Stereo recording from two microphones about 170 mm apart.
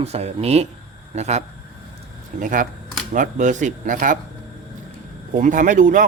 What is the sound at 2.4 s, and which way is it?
Speech, 50° right (ahead or behind).